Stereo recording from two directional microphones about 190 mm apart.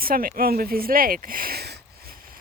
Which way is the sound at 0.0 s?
50° right (ahead or behind).